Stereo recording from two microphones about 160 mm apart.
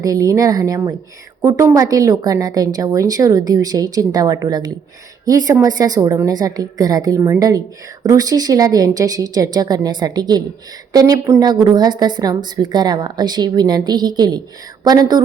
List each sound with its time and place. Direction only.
0.0 s a woman's voice: 20° right (ahead or behind)